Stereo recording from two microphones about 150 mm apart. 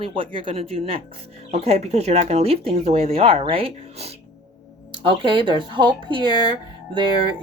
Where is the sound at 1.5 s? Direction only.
45° right (ahead or behind).